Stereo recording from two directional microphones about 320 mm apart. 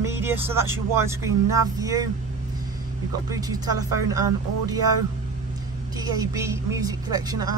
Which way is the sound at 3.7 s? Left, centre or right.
Right.